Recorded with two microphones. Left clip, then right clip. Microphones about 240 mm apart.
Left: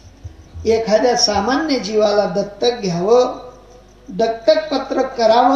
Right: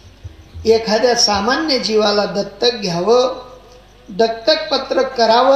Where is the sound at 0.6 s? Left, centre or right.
Right.